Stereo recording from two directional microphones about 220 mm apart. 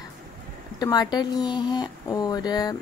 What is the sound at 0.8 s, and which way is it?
A woman's voice, 15° left (ahead or behind).